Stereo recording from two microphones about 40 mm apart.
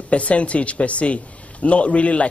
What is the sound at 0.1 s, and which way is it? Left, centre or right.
A man's voice, left.